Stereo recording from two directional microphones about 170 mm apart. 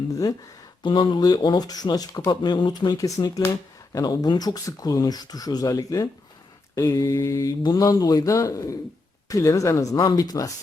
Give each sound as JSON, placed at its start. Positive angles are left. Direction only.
{"t": 0.1, "sound": "speech", "side_deg": 20}